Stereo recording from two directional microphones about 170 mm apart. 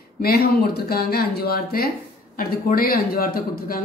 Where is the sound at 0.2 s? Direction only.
65° left (ahead or behind).